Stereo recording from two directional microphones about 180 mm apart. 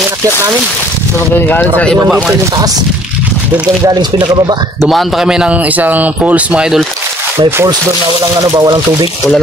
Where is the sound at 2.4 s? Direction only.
20° right (ahead or behind).